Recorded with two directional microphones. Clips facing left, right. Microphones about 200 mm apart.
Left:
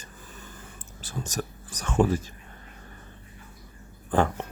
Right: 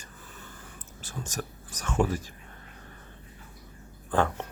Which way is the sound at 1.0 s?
35° left (ahead or behind).